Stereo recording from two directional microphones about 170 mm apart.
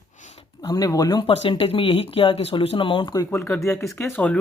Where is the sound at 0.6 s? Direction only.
20° left (ahead or behind).